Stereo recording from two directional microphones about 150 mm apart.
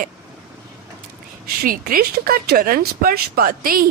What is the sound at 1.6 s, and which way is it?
A woman's voice, 75° right (ahead or behind).